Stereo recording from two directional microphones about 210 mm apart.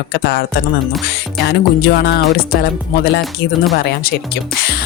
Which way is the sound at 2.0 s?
50° left (ahead or behind).